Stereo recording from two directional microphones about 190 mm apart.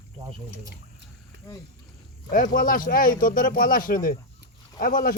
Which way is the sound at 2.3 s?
50° left (ahead or behind).